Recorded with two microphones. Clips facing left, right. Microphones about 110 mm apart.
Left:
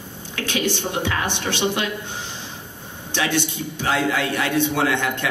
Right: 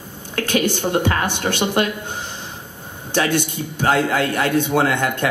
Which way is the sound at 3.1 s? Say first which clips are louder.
Right 3 dB; 45° right (ahead or behind).